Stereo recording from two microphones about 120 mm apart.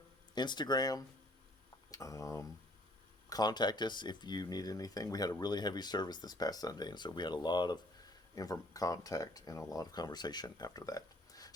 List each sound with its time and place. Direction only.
0.3 s speech: 35° left (ahead or behind)